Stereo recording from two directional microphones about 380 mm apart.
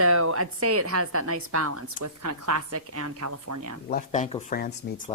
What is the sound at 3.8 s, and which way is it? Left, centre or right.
Speech, left.